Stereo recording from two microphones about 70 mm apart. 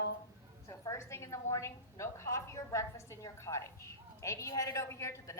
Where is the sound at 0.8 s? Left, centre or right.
Left.